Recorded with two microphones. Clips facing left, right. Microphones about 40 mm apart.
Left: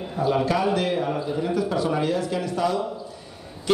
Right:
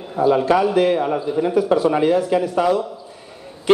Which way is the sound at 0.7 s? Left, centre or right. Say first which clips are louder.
Right 7 dB; centre.